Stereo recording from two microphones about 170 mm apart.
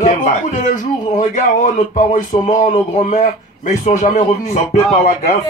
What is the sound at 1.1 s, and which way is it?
Speech, 45° left (ahead or behind).